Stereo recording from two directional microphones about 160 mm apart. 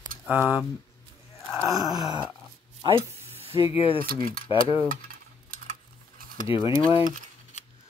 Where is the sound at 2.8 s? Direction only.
35° right (ahead or behind).